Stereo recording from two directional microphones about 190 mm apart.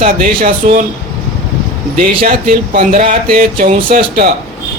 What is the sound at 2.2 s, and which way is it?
Speech, 50° right (ahead or behind).